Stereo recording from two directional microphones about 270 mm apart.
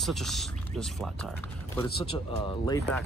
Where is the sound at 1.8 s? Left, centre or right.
Centre.